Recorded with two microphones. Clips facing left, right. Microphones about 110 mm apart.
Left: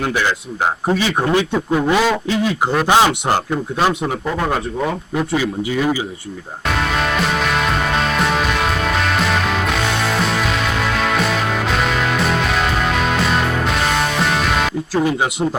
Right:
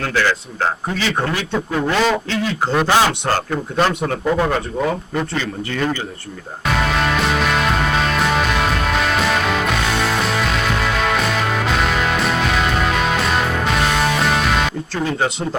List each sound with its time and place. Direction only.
0.0 s a man's voice: 15° left (ahead or behind)
6.7 s music: centre (ahead or behind)